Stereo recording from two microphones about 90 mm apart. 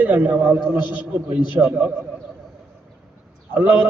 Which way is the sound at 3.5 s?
20° right (ahead or behind).